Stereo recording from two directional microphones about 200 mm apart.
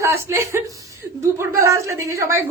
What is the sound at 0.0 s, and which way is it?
A woman's voice, 15° right (ahead or behind).